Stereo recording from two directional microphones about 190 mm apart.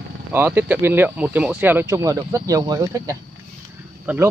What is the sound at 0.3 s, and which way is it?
Speech, 10° right (ahead or behind).